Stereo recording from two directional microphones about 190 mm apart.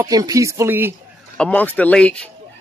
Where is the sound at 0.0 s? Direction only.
20° right (ahead or behind).